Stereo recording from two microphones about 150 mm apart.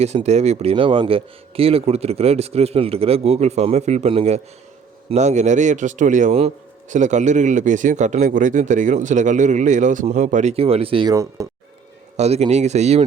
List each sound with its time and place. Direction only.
0.0 s speech: 45° right (ahead or behind)
11.1 s speech: 20° right (ahead or behind)
12.1 s speech: 45° right (ahead or behind)